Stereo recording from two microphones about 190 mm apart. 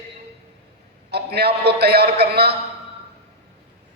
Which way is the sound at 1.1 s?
60° right (ahead or behind).